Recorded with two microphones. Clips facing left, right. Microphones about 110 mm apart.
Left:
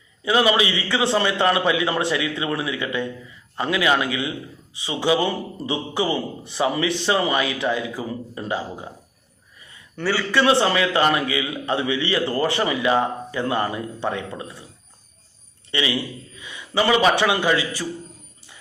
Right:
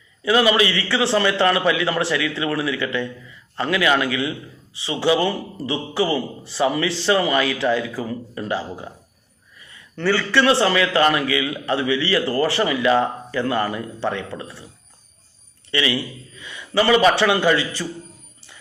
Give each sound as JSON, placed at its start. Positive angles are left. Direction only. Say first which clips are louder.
{"t": 0.2, "sound": "a man's voice", "louder": "right 2 dB", "side_deg": 25}
{"t": 10.0, "sound": "a man's voice", "louder": "right 2 dB", "side_deg": 10}
{"t": 10.4, "sound": "a man's voice", "louder": "even", "side_deg": 20}
{"t": 15.7, "sound": "a man's voice", "louder": "right 2 dB", "side_deg": 25}